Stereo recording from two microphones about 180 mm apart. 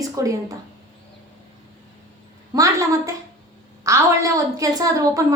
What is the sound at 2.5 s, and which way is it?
A woman's voice, 20° right (ahead or behind).